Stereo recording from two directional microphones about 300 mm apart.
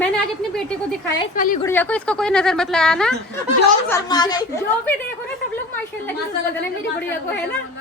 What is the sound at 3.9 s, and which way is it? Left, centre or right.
A woman's voice, centre.